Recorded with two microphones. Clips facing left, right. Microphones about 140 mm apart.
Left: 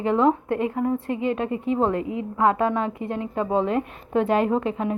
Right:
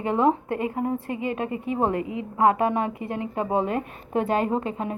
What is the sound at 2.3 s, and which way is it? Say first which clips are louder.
A woman's voice: right 1 dB; 15° right (ahead or behind).